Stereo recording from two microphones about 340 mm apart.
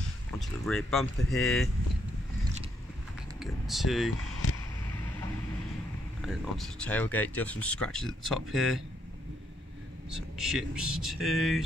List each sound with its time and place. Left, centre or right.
0.7 s speech: centre
3.3 s speech: centre
6.2 s speech: centre
10.1 s speech: centre